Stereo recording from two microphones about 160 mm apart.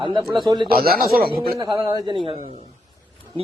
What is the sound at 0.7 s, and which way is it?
Speech, 70° right (ahead or behind).